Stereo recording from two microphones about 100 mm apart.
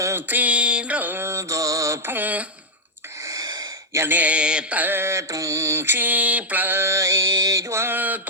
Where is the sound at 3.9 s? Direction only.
20° right (ahead or behind).